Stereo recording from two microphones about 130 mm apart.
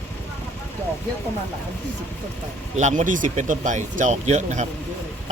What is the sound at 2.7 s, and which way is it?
Speech, 65° right (ahead or behind).